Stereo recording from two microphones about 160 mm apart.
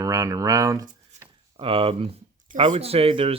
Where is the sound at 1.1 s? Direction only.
45° right (ahead or behind).